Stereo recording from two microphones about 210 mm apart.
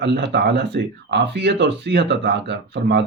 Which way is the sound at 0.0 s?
55° right (ahead or behind).